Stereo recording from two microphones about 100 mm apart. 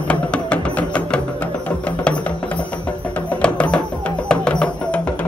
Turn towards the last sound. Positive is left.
turn(degrees=10)  # may be behind; listen again after turning